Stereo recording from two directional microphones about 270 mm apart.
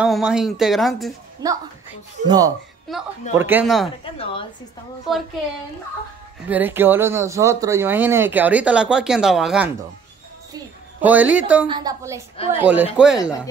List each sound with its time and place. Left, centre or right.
0.0 s speech: centre
1.4 s speech: centre
4.0 s a woman's voice: centre
6.5 s speech: centre
11.0 s speech: centre
11.6 s speech: centre